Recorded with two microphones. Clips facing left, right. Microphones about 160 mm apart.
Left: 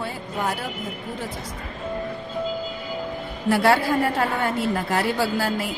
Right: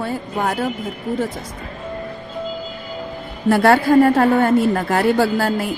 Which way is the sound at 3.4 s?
50° right (ahead or behind).